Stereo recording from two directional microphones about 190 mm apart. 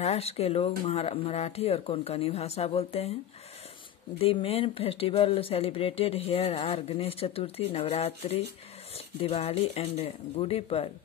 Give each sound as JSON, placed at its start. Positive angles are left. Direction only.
{"t": 0.0, "sound": "speech", "side_deg": 35}
{"t": 4.2, "sound": "speech", "side_deg": 30}